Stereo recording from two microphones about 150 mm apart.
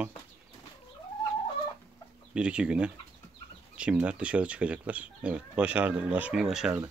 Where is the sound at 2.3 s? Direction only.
5° right (ahead or behind).